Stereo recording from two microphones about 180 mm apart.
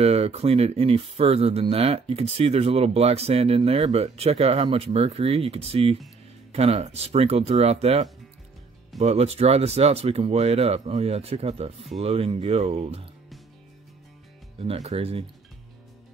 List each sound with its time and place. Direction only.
0.0 s speech: 35° right (ahead or behind)
14.6 s speech: 35° right (ahead or behind)